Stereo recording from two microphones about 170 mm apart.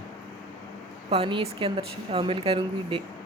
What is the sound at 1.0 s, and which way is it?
Speech, 30° right (ahead or behind).